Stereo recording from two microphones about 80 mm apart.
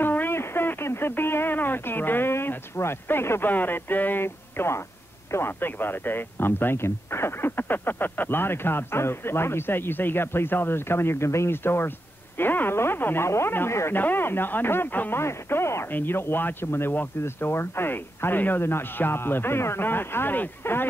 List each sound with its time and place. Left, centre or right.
0.0 s speech: left